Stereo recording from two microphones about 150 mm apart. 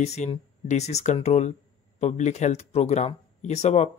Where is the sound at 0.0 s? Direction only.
50° left (ahead or behind).